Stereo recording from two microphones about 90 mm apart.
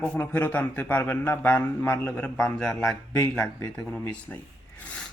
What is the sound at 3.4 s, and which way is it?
Speech, 40° left (ahead or behind).